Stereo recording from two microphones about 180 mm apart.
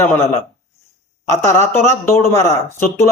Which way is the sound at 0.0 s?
10° left (ahead or behind).